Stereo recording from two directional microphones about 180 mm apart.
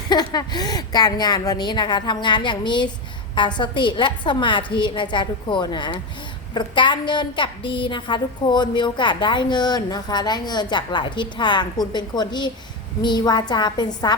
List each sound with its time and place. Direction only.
0.1 s a woman's voice: 25° left (ahead or behind)